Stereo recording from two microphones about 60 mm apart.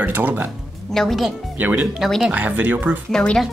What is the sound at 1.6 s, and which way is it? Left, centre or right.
Speech, right.